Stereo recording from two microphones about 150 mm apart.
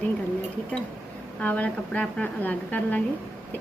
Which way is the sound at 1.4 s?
10° left (ahead or behind).